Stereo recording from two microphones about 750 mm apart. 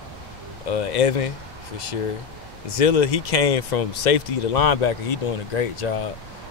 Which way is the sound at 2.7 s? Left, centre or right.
Left.